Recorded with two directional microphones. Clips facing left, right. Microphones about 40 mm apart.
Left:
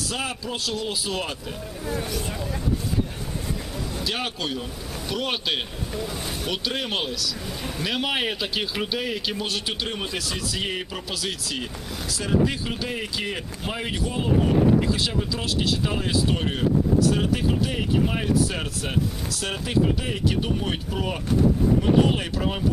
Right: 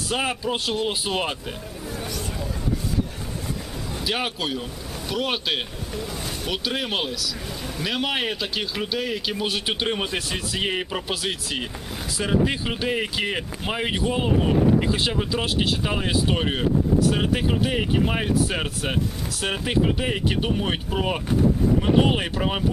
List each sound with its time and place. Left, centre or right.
0.1 s speech: right
1.9 s speech: centre
3.9 s speech: centre
9.6 s speech: right